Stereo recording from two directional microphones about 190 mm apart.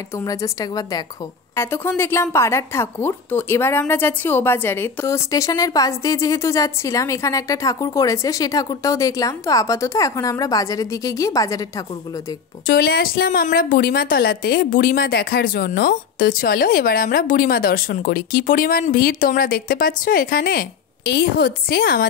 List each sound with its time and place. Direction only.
0.1 s a woman's voice: 20° left (ahead or behind)
12.6 s a woman's voice: 55° left (ahead or behind)